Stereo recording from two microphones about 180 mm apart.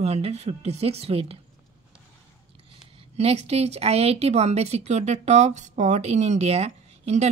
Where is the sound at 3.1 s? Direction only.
35° right (ahead or behind).